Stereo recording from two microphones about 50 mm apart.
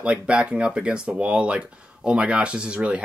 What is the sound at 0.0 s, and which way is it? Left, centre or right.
Speech, right.